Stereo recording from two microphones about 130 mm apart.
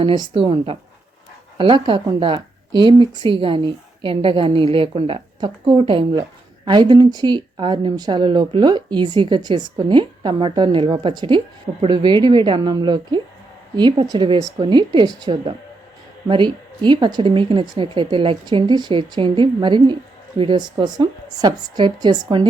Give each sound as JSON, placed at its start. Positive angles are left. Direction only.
{"t": 0.3, "sound": "speech", "side_deg": -45}